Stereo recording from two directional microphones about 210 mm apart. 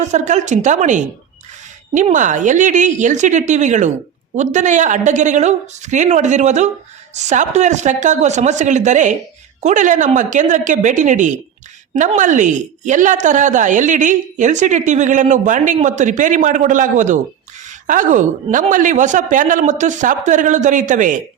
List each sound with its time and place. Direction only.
0.0 s a woman's voice: 35° right (ahead or behind)